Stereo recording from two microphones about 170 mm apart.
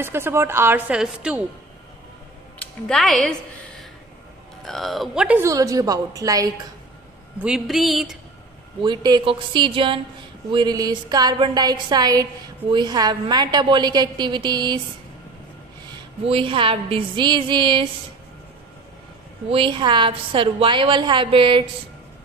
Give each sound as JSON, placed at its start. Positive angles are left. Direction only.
{"t": 0.0, "sound": "a woman's voice", "side_deg": -15}
{"t": 2.9, "sound": "a woman's voice", "side_deg": 0}
{"t": 5.4, "sound": "a woman's voice", "side_deg": -20}
{"t": 7.4, "sound": "speech", "side_deg": 0}
{"t": 8.8, "sound": "a woman's voice", "side_deg": -25}
{"t": 16.3, "sound": "a woman's voice", "side_deg": -30}
{"t": 19.5, "sound": "a woman's voice", "side_deg": -30}